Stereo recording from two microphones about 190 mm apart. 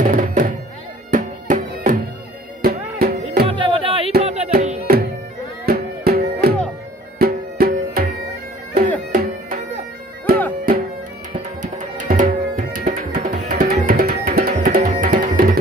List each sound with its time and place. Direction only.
0.0 s music: 45° right (ahead or behind)
3.4 s music: 30° right (ahead or behind)
5.7 s music: 55° right (ahead or behind)
11.3 s tabla: 40° right (ahead or behind)
13.1 s music: 50° right (ahead or behind)